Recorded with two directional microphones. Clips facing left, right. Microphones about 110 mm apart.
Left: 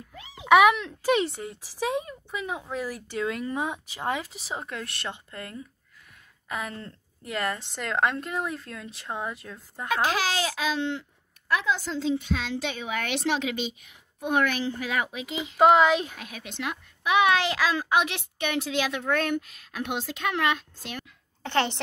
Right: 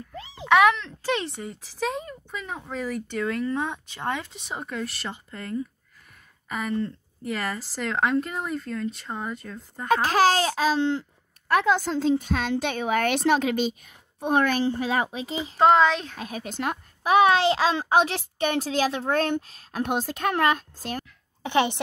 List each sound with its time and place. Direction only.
0.1 s a sound: 30° right (ahead or behind)
0.5 s speech: 10° left (ahead or behind)
10.0 s a child's voice: 40° right (ahead or behind)
11.4 s a woman's voice: 55° right (ahead or behind); by 15.5 s 35° right (ahead or behind)
15.5 s speech: 5° left (ahead or behind)
16.2 s a child's voice: 40° right (ahead or behind)
21.4 s a woman's voice: 15° right (ahead or behind)